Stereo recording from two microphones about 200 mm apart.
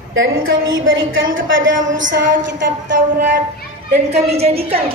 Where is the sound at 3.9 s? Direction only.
30° right (ahead or behind).